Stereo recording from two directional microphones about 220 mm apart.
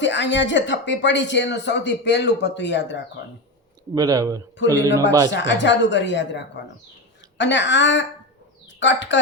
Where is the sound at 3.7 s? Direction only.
15° right (ahead or behind).